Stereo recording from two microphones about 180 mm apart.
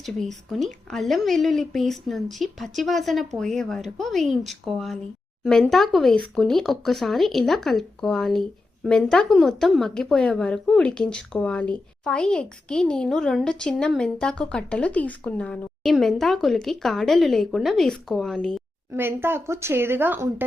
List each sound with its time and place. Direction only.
0.0 s speech: centre (ahead or behind)
18.9 s a woman's voice: 10° right (ahead or behind)